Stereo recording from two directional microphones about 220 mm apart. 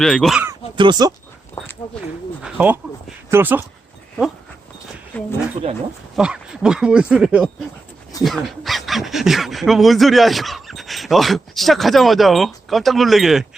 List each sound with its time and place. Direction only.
0.0 s speech: centre (ahead or behind)
0.8 s speech: 20° right (ahead or behind)
2.4 s bird: 5° right (ahead or behind)
3.2 s speech: 10° right (ahead or behind)
5.1 s speech: 5° left (ahead or behind)